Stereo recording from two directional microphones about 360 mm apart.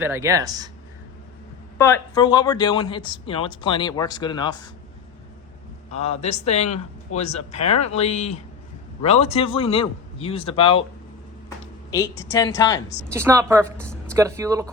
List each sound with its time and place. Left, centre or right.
0.0 s a woman's voice: centre
1.8 s speech: centre
5.9 s speech: centre
13.1 s a woman's voice: centre